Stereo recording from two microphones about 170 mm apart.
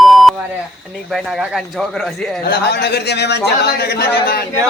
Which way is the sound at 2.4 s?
75° left (ahead or behind).